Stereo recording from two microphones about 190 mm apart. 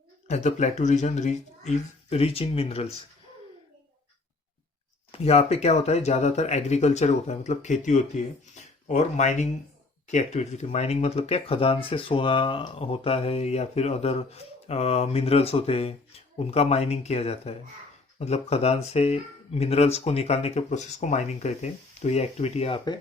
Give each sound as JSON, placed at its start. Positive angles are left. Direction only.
{"t": 0.3, "sound": "speech", "side_deg": 35}
{"t": 5.1, "sound": "speech", "side_deg": 30}